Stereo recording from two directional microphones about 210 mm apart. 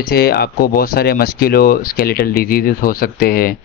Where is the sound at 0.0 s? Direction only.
45° left (ahead or behind).